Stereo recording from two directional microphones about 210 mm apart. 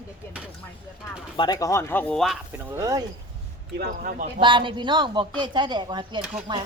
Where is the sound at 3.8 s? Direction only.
40° right (ahead or behind).